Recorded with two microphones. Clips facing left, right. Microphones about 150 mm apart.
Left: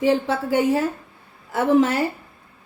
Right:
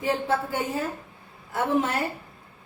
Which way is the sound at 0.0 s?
85° left.